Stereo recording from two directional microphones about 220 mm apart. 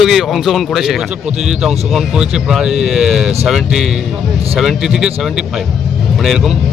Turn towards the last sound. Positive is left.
turn(degrees=0)  # may be behind; listen again after turning